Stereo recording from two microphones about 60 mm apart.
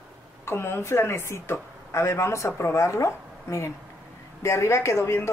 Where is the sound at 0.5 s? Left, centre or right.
Left.